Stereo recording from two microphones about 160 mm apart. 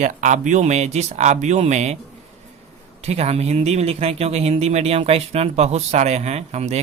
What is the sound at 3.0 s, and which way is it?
Speech, 40° right (ahead or behind).